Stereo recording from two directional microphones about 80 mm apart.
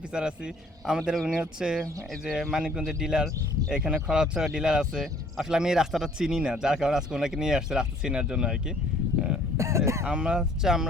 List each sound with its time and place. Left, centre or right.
0.1 s speech: centre
9.6 s speech: right
10.1 s speech: centre